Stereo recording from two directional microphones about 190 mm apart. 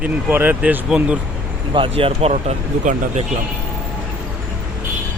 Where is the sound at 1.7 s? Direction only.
30° right (ahead or behind).